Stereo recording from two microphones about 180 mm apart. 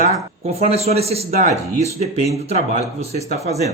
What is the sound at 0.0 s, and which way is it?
Speech, 40° right (ahead or behind).